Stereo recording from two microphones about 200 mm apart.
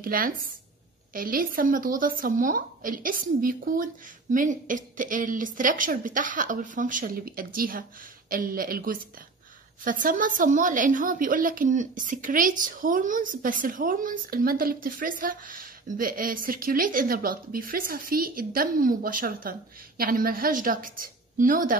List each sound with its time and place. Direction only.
0.0 s a woman's voice: 45° right (ahead or behind)